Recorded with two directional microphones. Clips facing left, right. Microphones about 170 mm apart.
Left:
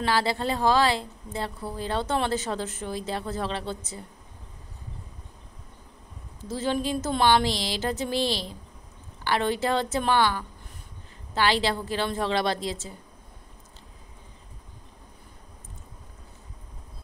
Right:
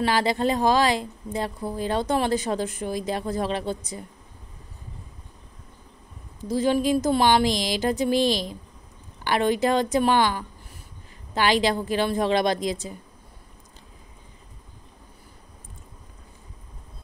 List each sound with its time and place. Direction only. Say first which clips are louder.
0.0 s speech: right 3 dB; 15° right (ahead or behind)
6.4 s speech: right 6 dB; 15° right (ahead or behind)